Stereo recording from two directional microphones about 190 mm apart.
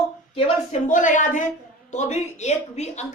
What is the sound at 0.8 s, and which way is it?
A woman's voice, 40° left (ahead or behind).